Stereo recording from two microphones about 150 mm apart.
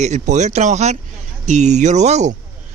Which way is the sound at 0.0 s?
50° right (ahead or behind).